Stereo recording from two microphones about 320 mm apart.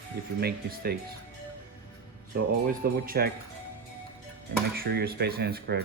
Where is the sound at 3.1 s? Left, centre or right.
Right.